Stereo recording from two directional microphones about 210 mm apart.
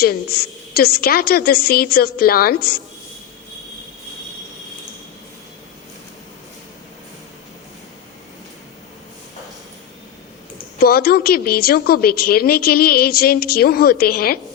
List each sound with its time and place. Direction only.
0.0 s a woman's voice: 45° left (ahead or behind)
10.8 s a woman's voice: 45° left (ahead or behind)